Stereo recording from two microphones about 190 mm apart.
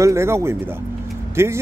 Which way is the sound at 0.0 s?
15° right (ahead or behind).